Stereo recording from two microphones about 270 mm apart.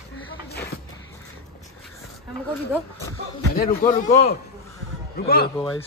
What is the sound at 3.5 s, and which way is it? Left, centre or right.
Speech, left.